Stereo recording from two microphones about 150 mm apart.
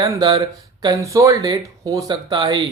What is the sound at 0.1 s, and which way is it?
Speech, 30° right (ahead or behind).